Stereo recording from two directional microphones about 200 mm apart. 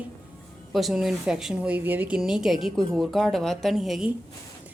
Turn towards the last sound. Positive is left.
turn(degrees=0)  # may be behind; listen again after turning